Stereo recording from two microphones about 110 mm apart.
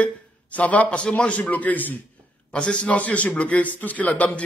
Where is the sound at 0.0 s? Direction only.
15° left (ahead or behind).